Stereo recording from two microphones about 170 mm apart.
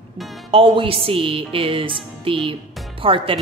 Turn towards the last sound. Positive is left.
turn(degrees=-30)  # may be behind; listen again after turning